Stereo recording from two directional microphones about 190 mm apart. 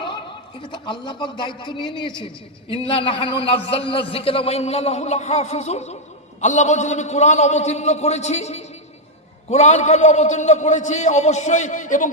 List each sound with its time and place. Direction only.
0.6 s a man's voice: 25° left (ahead or behind); by 12.1 s 40° left (ahead or behind)